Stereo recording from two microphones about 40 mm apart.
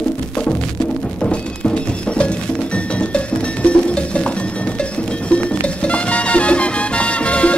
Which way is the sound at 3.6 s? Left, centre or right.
Left.